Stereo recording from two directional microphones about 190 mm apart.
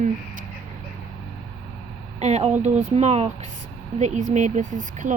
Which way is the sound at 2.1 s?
35° right (ahead or behind).